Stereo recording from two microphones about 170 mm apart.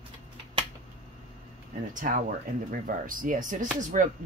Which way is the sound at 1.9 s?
50° right (ahead or behind).